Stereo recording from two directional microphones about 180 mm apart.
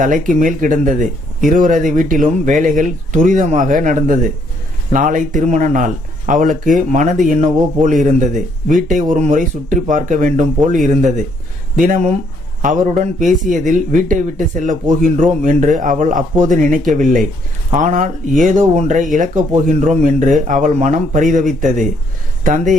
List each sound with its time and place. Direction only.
0.0 s speech: 45° right (ahead or behind)
13.2 s speech: centre (ahead or behind)
13.5 s speech: 45° right (ahead or behind)